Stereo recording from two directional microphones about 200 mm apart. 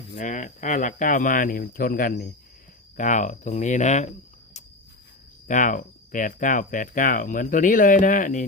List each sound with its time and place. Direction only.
0.2 s speech: 40° left (ahead or behind)
5.5 s speech: 40° left (ahead or behind)